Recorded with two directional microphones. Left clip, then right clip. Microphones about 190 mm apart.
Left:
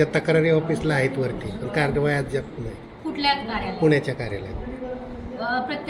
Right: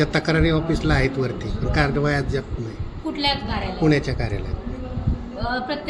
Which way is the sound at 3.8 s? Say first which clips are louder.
Left 1 dB; 40° right (ahead or behind).